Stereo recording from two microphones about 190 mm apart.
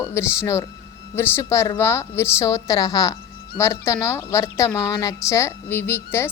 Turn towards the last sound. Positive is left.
turn(degrees=10)  # may be behind; listen again after turning